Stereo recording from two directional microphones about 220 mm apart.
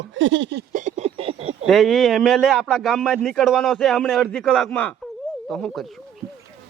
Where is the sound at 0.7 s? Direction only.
35° right (ahead or behind).